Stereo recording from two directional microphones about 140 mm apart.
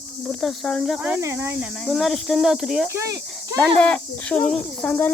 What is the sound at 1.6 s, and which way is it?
Speech, centre (ahead or behind).